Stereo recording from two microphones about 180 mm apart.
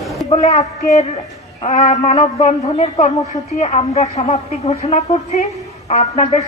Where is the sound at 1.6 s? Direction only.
35° left (ahead or behind).